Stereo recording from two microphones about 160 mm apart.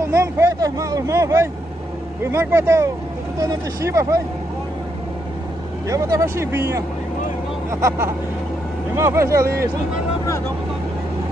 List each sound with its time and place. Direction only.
0.1 s speech: 20° right (ahead or behind)
5.9 s speech: 20° right (ahead or behind)